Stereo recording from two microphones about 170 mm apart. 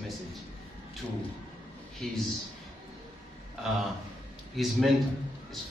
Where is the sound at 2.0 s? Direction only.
Centre (ahead or behind).